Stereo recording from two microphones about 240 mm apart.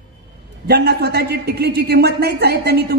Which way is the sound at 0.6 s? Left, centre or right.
Right.